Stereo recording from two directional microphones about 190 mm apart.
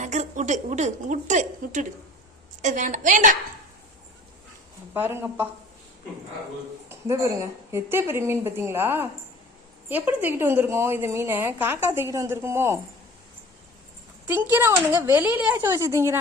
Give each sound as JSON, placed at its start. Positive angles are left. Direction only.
{"t": 0.0, "sound": "a woman's voice", "side_deg": -40}
{"t": 4.9, "sound": "a woman's voice", "side_deg": -10}
{"t": 6.8, "sound": "a woman's voice", "side_deg": -15}
{"t": 14.3, "sound": "a woman's voice", "side_deg": -10}